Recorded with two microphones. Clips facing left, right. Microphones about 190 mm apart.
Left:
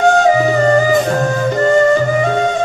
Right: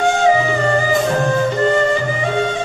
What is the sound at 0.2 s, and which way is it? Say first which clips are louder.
Flute: left 3 dB; 40° left (ahead or behind).